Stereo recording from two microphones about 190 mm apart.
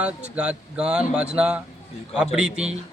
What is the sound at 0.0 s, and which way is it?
A man's voice, 5° right (ahead or behind).